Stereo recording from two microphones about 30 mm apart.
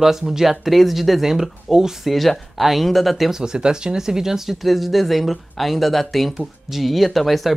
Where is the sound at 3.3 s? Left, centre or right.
Right.